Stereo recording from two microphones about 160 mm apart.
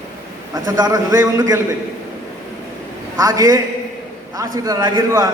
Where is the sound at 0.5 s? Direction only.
25° right (ahead or behind).